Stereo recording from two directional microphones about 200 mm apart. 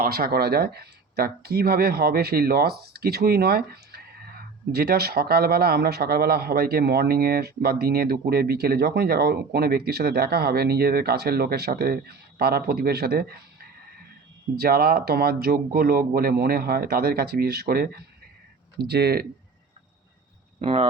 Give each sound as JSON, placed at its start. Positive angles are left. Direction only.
{"t": 0.0, "sound": "speech", "side_deg": -50}
{"t": 14.5, "sound": "speech", "side_deg": -50}
{"t": 20.6, "sound": "speech", "side_deg": -30}